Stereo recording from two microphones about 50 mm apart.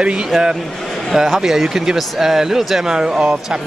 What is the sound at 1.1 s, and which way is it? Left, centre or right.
Speech, centre.